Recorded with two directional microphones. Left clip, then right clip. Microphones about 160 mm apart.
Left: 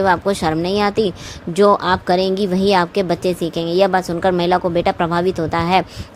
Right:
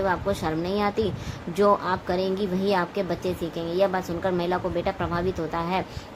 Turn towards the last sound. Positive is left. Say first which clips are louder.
# left 11 dB
turn(degrees=55)  # may be behind; listen again after turning